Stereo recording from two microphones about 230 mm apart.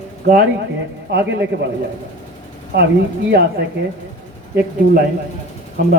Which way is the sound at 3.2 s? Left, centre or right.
Right.